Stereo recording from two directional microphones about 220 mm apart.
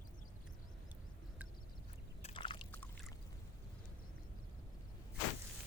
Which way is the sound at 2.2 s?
25° left (ahead or behind).